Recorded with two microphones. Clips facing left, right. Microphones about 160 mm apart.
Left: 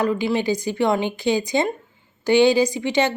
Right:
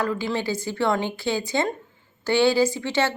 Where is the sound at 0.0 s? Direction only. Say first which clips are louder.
Left 5 dB; 15° left (ahead or behind).